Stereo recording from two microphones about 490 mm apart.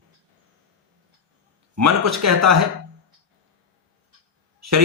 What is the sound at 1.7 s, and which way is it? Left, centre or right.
Speech, right.